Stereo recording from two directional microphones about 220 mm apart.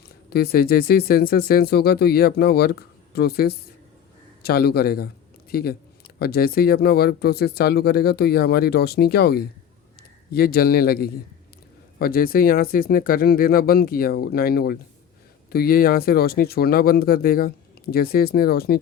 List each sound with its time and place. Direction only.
0.3 s speech: 45° left (ahead or behind)